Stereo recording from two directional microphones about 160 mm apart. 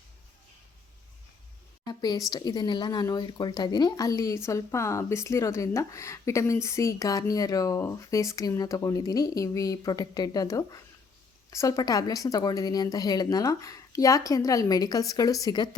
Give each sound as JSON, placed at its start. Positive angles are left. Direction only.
{"t": 1.8, "sound": "a woman's voice", "side_deg": 25}